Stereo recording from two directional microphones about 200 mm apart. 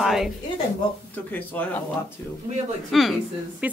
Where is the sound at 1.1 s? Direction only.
10° left (ahead or behind).